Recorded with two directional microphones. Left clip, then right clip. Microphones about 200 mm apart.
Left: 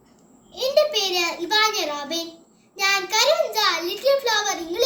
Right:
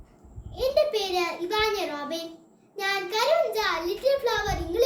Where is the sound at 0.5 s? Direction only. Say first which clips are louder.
Left 4 dB; 15° right (ahead or behind).